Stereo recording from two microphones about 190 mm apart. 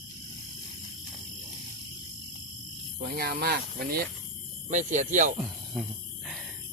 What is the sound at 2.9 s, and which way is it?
Speech, 55° right (ahead or behind).